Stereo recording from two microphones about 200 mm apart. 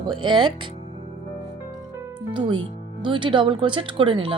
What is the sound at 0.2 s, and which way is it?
Speech, 25° right (ahead or behind).